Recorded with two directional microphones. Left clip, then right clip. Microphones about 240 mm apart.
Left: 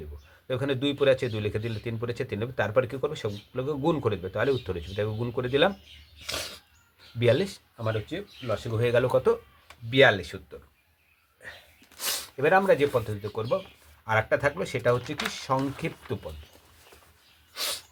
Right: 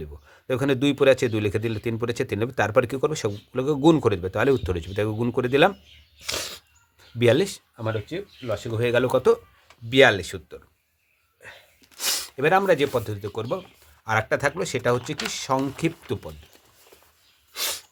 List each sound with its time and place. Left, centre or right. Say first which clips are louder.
0.4 s speech: right 5 dB; right
11.9 s speech: right 4 dB; right
17.5 s sneeze: right 3 dB; right